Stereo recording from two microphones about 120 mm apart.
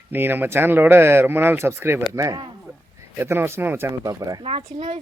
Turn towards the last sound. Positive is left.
turn(degrees=-75)  # may be behind; listen again after turning